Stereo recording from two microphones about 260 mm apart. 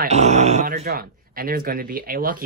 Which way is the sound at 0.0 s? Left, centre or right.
Right.